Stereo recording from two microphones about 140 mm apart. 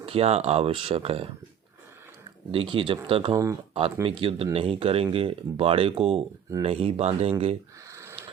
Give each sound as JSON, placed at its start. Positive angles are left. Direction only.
{"t": 0.0, "sound": "speech", "side_deg": -45}
{"t": 2.5, "sound": "speech", "side_deg": -40}
{"t": 7.9, "sound": "a sound", "side_deg": -20}